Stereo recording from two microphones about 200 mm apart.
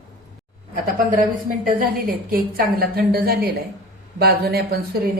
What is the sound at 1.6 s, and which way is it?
A woman's voice, 45° right (ahead or behind).